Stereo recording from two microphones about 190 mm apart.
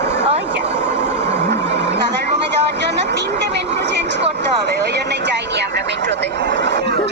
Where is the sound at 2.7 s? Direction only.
65° right (ahead or behind).